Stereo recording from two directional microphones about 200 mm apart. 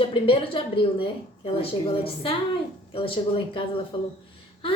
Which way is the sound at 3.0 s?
25° left (ahead or behind).